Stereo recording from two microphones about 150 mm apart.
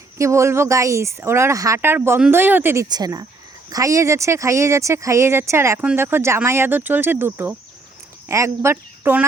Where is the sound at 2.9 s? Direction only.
25° right (ahead or behind).